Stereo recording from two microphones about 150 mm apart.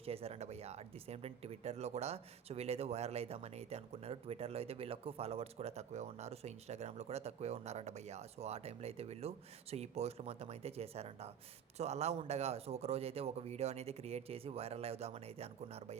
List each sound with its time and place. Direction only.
0.0 s speech: 40° right (ahead or behind)